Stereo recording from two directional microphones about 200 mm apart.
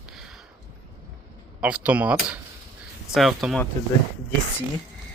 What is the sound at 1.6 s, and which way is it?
Speech, 5° right (ahead or behind).